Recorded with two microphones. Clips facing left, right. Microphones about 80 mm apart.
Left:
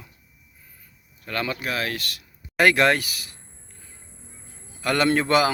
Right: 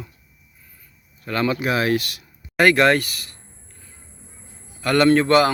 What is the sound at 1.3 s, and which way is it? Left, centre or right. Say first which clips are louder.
Speech: right 6 dB; centre.